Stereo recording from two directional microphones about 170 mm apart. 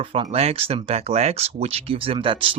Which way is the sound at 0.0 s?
35° right (ahead or behind).